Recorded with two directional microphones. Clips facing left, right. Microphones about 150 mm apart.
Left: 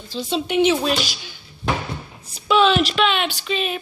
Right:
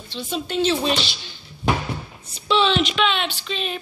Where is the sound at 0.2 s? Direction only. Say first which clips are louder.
Left 4 dB; 35° left (ahead or behind).